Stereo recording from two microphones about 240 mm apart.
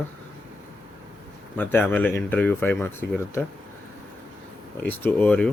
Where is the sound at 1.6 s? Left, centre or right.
Centre.